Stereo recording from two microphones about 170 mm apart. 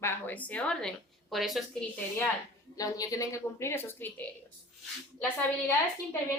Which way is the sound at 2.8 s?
20° left (ahead or behind).